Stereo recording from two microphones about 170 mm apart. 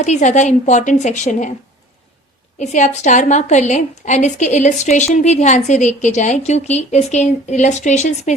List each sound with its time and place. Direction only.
0.0 s a woman's voice: 45° left (ahead or behind)
2.6 s a woman's voice: 45° left (ahead or behind)